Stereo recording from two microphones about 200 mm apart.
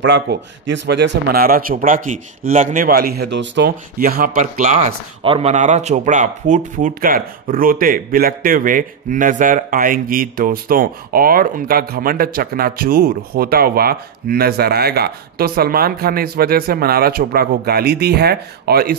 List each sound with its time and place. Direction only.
0.0 s a man's voice: 60° right (ahead or behind)